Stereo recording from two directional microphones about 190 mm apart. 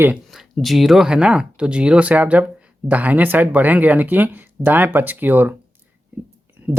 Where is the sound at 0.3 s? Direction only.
Centre (ahead or behind).